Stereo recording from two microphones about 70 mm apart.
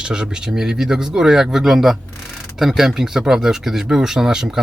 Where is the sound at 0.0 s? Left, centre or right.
Centre.